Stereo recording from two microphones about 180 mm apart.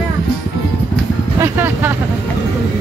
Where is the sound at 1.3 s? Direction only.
15° right (ahead or behind).